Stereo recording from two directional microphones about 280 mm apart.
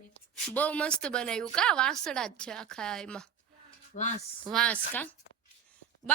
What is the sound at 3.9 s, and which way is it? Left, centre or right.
Speech, left.